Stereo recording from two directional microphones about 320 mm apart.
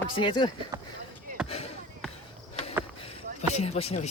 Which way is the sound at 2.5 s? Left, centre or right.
Centre.